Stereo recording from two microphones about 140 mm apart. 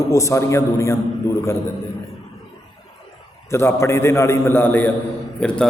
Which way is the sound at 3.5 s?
20° left (ahead or behind).